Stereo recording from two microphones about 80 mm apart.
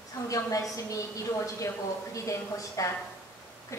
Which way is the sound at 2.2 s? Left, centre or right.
Left.